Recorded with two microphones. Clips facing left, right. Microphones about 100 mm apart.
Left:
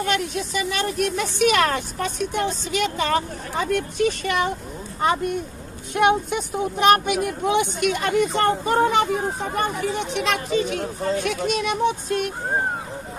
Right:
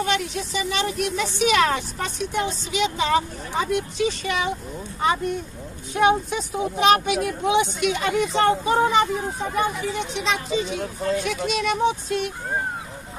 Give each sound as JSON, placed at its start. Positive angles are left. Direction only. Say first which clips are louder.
{"t": 0.0, "sound": "a woman's voice", "louder": "left 1 dB", "side_deg": 50}